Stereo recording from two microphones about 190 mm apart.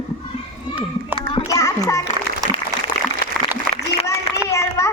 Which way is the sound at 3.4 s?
Centre (ahead or behind).